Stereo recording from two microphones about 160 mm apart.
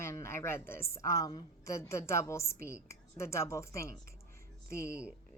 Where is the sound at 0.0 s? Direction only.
15° left (ahead or behind).